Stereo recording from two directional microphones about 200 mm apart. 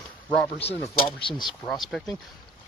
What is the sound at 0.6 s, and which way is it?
Speech, 30° left (ahead or behind).